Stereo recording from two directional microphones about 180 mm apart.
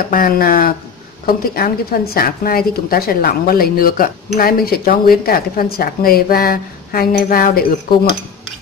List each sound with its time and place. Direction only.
0.1 s a woman's voice: 55° left (ahead or behind)